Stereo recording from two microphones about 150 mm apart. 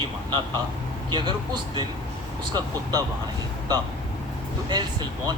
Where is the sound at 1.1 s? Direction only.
30° right (ahead or behind).